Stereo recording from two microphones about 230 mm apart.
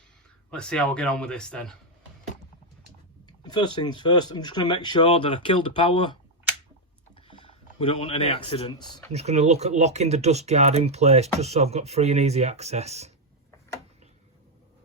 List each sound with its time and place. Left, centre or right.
0.5 s speech: centre
3.2 s speech: centre
7.3 s speech: left
9.1 s speech: right